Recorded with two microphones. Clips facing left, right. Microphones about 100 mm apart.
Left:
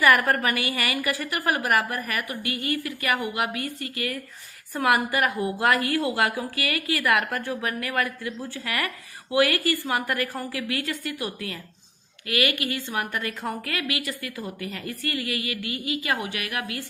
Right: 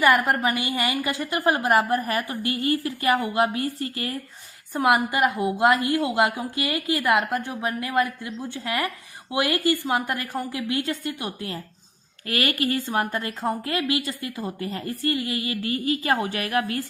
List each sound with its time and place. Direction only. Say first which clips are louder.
0.0 s a woman's voice: right 1 dB; 20° right (ahead or behind)
4.7 s a woman's voice: right 2 dB; 20° right (ahead or behind); by 16.8 s 35° right (ahead or behind)